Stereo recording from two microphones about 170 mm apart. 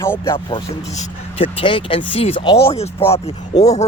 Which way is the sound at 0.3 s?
35° left (ahead or behind).